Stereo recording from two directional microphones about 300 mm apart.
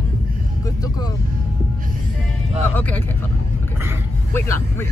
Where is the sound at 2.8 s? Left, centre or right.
Centre.